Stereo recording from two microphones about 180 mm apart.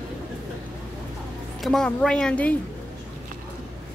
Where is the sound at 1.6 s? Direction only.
Centre (ahead or behind).